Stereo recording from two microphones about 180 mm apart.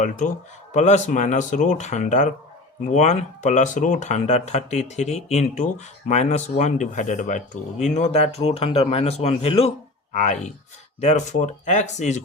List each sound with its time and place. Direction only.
0.7 s speech: 40° left (ahead or behind)